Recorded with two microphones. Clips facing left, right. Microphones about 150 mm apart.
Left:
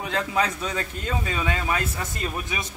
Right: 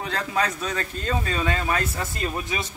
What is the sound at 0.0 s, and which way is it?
Speech, 15° left (ahead or behind).